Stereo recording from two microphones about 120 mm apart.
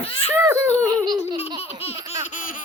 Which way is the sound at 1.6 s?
55° left (ahead or behind).